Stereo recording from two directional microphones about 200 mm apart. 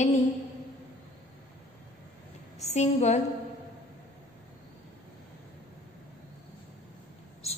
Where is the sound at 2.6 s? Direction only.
35° left (ahead or behind).